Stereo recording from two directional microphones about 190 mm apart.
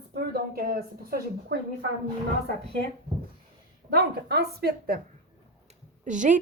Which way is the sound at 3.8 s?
55° right (ahead or behind).